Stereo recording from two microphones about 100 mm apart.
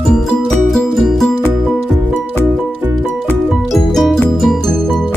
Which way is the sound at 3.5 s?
Centre (ahead or behind).